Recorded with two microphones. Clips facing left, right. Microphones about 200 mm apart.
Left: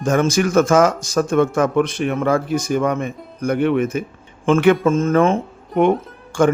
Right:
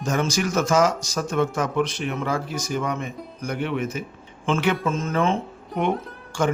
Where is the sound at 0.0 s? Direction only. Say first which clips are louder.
Left 7 dB; 50° left (ahead or behind).